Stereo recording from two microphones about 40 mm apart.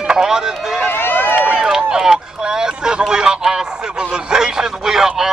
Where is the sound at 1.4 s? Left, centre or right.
Right.